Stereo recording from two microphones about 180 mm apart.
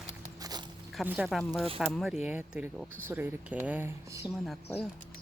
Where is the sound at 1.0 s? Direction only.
Centre (ahead or behind).